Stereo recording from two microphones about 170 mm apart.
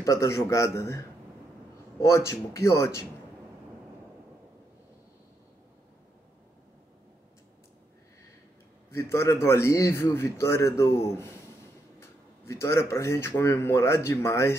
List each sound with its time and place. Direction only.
0.0 s speech: 15° left (ahead or behind)
8.9 s speech: 15° left (ahead or behind)